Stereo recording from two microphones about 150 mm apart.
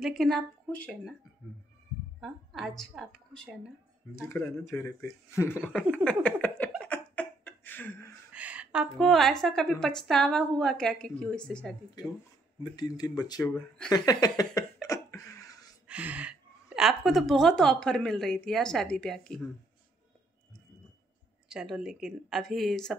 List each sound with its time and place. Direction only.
0.0 s a woman's voice: centre (ahead or behind)
2.1 s a woman's voice: centre (ahead or behind)
4.1 s speech: 20° left (ahead or behind)
6.0 s laughter: 10° left (ahead or behind)
8.3 s a woman's voice: 10° right (ahead or behind)
12.7 s speech: 25° left (ahead or behind)
13.8 s a sound: 25° left (ahead or behind)
15.9 s a woman's voice: 10° right (ahead or behind)
21.5 s a woman's voice: 5° right (ahead or behind)